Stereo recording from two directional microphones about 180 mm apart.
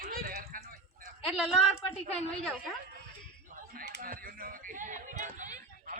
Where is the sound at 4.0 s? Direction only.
55° right (ahead or behind).